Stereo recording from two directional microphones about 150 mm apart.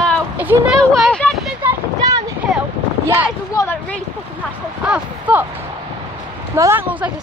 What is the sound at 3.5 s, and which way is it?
Speech, 20° left (ahead or behind).